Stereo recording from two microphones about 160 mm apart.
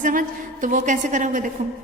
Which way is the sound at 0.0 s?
55° right (ahead or behind).